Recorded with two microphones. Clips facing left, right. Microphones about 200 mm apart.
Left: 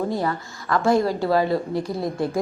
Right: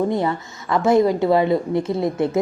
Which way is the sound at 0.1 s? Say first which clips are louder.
Right 3 dB; 20° right (ahead or behind).